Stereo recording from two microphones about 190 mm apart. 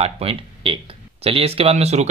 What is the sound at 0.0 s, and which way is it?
Speech, 30° right (ahead or behind).